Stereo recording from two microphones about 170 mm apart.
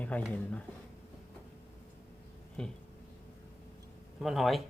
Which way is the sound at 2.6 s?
5° left (ahead or behind).